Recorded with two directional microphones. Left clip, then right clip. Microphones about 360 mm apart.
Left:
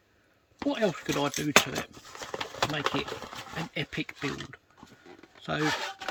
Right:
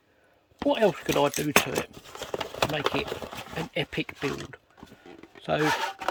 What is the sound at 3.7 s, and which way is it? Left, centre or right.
Speech, centre.